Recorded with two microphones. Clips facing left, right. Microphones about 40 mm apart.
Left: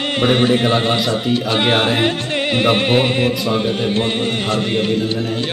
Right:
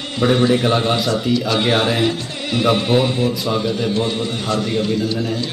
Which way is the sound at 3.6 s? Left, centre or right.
Left.